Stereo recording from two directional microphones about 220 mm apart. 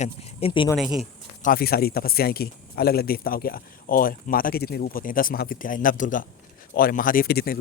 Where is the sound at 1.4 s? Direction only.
40° left (ahead or behind).